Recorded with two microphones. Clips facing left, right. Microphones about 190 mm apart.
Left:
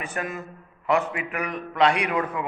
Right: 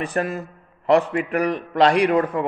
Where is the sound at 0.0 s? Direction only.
35° right (ahead or behind).